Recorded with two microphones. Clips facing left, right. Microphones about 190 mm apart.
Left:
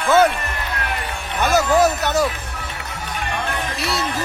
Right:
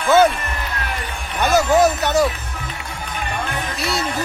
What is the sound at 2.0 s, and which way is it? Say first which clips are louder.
Speech: right 2 dB; centre (ahead or behind).